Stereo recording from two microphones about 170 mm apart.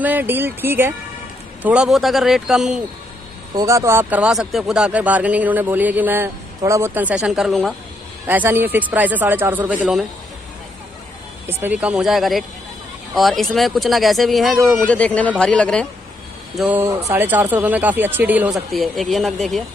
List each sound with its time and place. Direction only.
0.0 s speech: 10° right (ahead or behind)
3.5 s speech: 20° right (ahead or behind)
11.4 s speech: 10° right (ahead or behind); by 15.9 s 5° left (ahead or behind)
16.5 s speech: 10° right (ahead or behind)
18.7 s speech: centre (ahead or behind)